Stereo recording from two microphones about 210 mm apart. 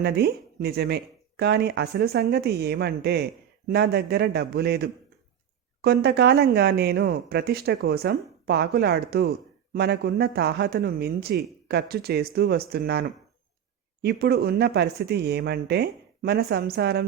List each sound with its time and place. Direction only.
0.0 s speech: 50° right (ahead or behind)